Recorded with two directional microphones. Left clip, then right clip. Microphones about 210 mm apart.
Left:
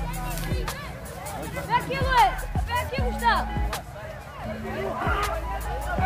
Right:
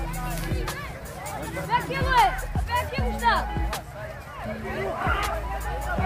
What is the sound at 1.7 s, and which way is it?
Music, 55° right (ahead or behind).